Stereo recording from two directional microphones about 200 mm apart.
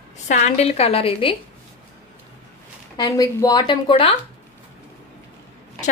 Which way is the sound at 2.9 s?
20° left (ahead or behind).